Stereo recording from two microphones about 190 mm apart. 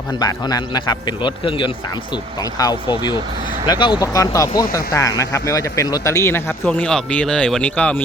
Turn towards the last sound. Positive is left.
turn(degrees=5)  # may be behind; listen again after turning